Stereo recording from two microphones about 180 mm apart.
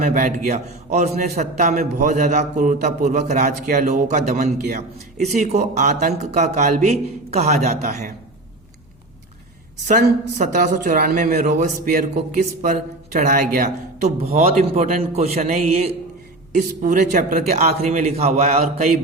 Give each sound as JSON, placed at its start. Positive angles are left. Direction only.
{"t": 0.0, "sound": "a man's voice", "side_deg": -50}
{"t": 10.3, "sound": "a man's voice", "side_deg": -45}